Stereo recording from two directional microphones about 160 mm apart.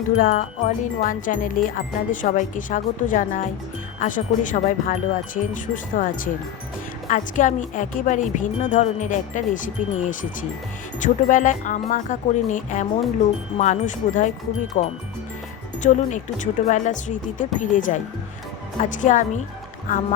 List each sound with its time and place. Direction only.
0.2 s music: 45° left (ahead or behind)
7.1 s speech: 50° left (ahead or behind)